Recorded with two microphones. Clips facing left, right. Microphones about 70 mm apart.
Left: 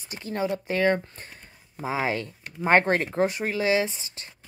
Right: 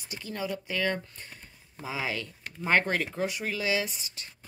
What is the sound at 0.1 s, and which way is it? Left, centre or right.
A woman's voice, left.